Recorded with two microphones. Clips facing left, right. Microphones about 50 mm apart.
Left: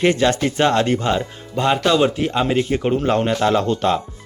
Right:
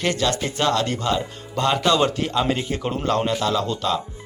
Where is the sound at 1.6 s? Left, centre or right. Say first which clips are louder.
Left 3 dB; centre.